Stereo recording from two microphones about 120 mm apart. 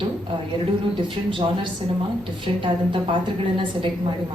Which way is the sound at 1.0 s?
45° right (ahead or behind).